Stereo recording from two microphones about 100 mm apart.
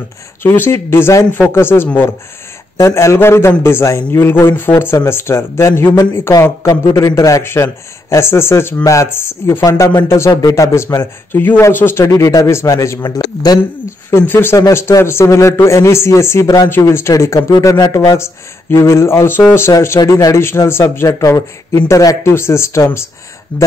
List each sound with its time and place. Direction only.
0.4 s a man's voice: 25° left (ahead or behind)
6.6 s a man's voice: 40° left (ahead or behind); by 12.1 s 25° left (ahead or behind)
12.1 s a man's voice: 35° left (ahead or behind)
14.1 s a man's voice: 20° left (ahead or behind); by 18.1 s 45° left (ahead or behind)
18.1 s a man's voice: 25° left (ahead or behind)
20.0 s a man's voice: 35° left (ahead or behind)
21.2 s a man's voice: 40° left (ahead or behind)
23.5 s speech: 15° left (ahead or behind)